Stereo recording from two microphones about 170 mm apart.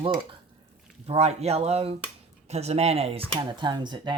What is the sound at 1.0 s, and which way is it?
Speech, 40° right (ahead or behind).